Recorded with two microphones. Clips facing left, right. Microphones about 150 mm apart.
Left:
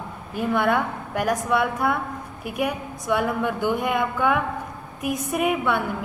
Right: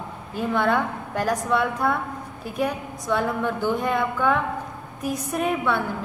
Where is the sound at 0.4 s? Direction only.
10° left (ahead or behind).